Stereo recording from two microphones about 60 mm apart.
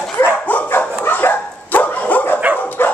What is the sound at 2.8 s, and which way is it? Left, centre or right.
Dog, left.